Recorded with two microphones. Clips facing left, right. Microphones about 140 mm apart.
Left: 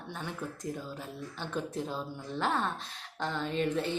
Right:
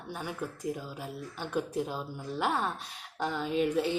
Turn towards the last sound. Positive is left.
turn(degrees=-10)  # may be behind; listen again after turning